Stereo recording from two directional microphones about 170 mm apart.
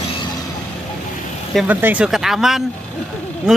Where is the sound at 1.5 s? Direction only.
Centre (ahead or behind).